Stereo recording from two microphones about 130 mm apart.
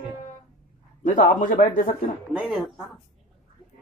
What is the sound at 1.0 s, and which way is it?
Speech, 85° left.